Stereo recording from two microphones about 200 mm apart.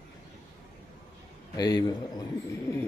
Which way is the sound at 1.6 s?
20° left (ahead or behind).